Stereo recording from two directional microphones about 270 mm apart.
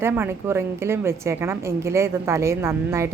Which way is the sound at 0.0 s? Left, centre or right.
Centre.